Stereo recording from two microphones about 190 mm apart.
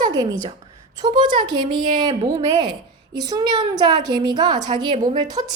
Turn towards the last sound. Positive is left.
turn(degrees=-20)  # may be behind; listen again after turning